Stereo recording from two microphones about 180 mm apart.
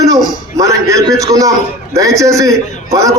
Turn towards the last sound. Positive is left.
turn(degrees=-20)  # may be behind; listen again after turning